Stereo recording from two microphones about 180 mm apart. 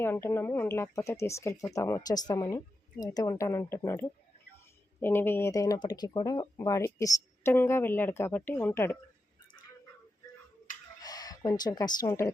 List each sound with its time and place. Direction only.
0.0 s speech: 15° left (ahead or behind)
11.0 s speech: 20° left (ahead or behind)